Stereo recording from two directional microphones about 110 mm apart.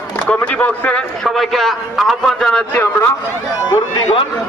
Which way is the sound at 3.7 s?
40° left (ahead or behind).